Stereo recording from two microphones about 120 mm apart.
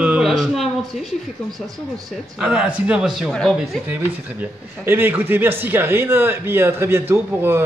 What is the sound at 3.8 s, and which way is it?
A man's voice, 15° right (ahead or behind).